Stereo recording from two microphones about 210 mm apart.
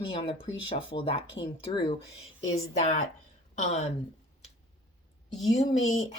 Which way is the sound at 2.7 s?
35° left (ahead or behind).